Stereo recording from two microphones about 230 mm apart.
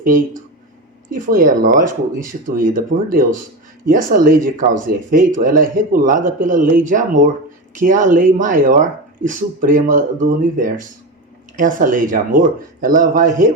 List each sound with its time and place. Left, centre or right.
0.0 s speech: right